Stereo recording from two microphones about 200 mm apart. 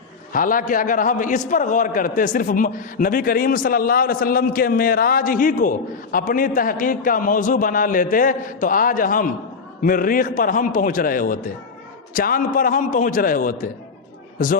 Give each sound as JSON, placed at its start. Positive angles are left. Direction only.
{"t": 0.3, "sound": "a man's voice", "side_deg": 45}